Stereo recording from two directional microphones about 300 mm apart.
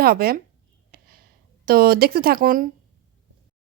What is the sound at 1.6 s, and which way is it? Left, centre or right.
A woman's voice, right.